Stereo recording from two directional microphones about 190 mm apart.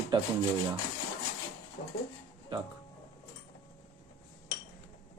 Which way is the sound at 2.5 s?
25° right (ahead or behind).